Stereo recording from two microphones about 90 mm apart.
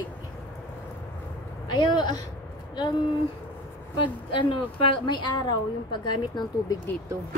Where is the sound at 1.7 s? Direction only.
55° left (ahead or behind).